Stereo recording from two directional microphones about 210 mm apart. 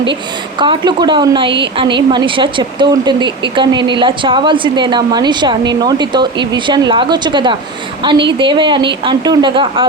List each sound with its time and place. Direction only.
0.6 s speech: 20° right (ahead or behind)